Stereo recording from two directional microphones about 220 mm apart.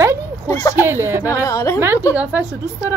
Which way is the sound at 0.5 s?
15° left (ahead or behind).